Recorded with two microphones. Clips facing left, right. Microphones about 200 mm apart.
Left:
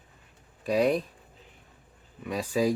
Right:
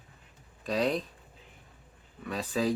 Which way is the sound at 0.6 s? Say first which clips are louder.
Left 5 dB; 10° left (ahead or behind).